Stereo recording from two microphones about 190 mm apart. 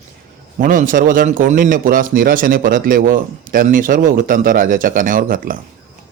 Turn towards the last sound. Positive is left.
turn(degrees=-45)  # may be behind; listen again after turning